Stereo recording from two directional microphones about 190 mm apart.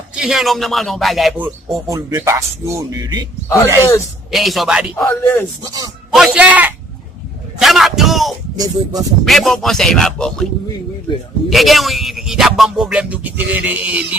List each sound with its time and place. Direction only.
0.1 s speech: 5° right (ahead or behind)
1.9 s speech: 15° right (ahead or behind)
4.3 s speech: centre (ahead or behind)
5.0 s speech: 10° left (ahead or behind)
5.6 s speech: 20° right (ahead or behind)
6.1 s speech: 5° right (ahead or behind)
8.5 s speech: 20° right (ahead or behind)
9.2 s speech: centre (ahead or behind)